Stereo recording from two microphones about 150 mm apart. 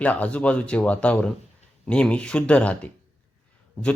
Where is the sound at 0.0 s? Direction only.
10° left (ahead or behind).